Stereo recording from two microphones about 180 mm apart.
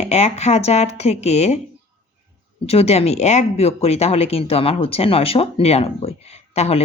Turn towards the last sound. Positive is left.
turn(degrees=35)  # may be behind; listen again after turning